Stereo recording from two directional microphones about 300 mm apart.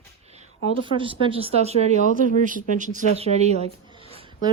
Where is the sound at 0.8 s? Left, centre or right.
Centre.